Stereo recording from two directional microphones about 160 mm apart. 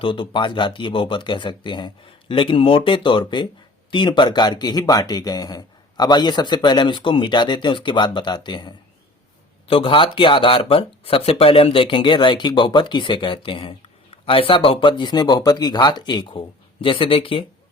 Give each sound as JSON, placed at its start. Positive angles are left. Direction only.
{"t": 0.0, "sound": "speech", "side_deg": 30}